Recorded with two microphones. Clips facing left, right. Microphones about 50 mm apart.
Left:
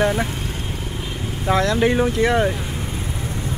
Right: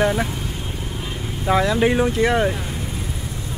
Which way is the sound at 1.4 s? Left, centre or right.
Centre.